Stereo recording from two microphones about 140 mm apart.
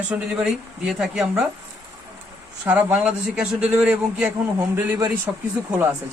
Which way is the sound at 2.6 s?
10° right (ahead or behind).